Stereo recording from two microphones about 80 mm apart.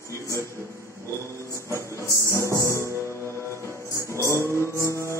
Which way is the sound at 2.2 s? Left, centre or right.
Right.